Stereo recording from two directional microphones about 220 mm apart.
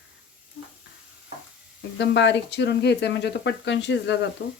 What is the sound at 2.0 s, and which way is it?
Speech, 50° left (ahead or behind).